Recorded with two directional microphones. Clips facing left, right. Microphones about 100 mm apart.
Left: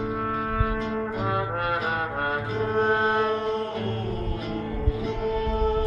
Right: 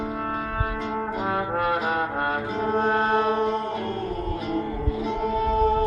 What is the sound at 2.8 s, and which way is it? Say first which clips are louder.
Music: even; 5° right (ahead or behind).